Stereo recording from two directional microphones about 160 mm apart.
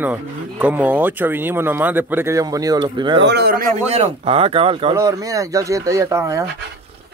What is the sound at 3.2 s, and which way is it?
Speech, 85° right.